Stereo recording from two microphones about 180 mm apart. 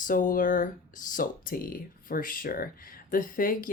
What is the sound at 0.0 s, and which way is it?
Speech, 50° left (ahead or behind).